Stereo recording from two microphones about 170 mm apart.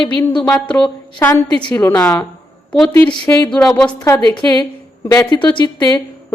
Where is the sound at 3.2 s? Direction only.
20° left (ahead or behind).